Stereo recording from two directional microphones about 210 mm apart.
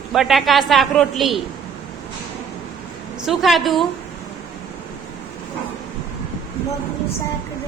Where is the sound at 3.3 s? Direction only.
Centre (ahead or behind).